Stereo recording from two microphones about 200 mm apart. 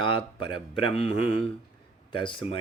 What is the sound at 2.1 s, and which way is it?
Speech, 25° left (ahead or behind).